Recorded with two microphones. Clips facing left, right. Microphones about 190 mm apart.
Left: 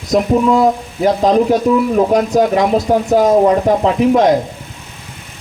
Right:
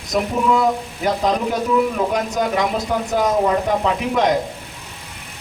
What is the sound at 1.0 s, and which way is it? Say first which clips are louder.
Speech: left 8 dB; 45° left (ahead or behind).